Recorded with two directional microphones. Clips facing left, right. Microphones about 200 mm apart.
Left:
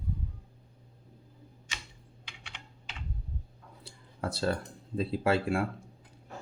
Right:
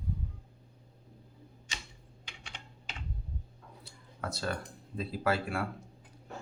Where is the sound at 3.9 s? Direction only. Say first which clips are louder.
Left 4 dB; 30° left (ahead or behind).